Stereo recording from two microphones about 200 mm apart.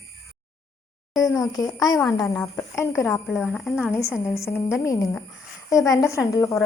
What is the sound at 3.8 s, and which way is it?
Speech, 10° left (ahead or behind).